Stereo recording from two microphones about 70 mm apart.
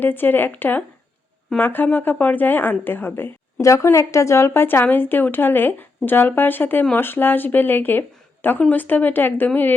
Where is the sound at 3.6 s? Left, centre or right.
Left.